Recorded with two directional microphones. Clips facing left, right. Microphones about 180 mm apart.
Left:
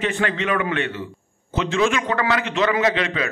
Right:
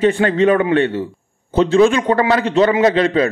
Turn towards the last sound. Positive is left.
turn(degrees=-35)  # may be behind; listen again after turning